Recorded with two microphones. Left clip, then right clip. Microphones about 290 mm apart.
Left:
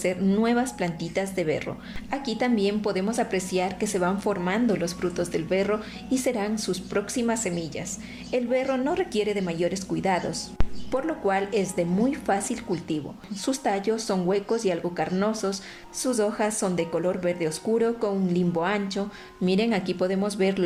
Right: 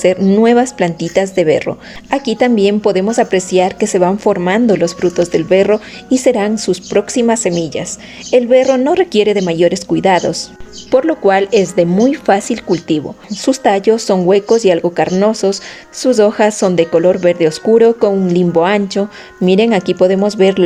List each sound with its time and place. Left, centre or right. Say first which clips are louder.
0.0 s speech: right 15 dB; right